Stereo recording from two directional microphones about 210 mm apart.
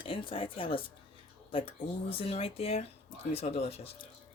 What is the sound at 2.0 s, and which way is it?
Speech, 30° left (ahead or behind).